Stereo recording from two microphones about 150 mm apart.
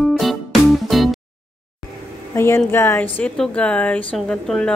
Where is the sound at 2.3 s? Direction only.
15° left (ahead or behind).